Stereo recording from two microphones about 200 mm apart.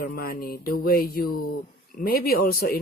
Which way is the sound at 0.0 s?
50° left (ahead or behind).